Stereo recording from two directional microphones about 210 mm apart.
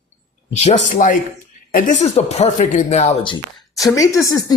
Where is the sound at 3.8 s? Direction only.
15° left (ahead or behind).